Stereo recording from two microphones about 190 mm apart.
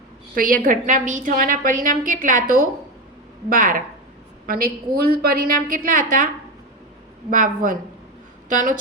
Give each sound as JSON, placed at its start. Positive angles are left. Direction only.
{"t": 0.3, "sound": "a woman's voice", "side_deg": -45}